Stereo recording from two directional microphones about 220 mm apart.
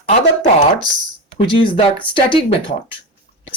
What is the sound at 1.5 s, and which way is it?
Speech, 20° left (ahead or behind).